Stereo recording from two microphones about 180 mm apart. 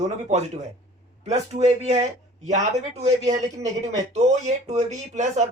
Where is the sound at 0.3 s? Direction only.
40° right (ahead or behind).